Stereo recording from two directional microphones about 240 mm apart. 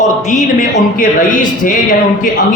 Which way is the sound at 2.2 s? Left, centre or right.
Left.